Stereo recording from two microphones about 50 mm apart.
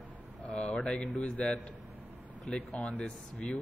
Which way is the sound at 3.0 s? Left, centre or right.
Left.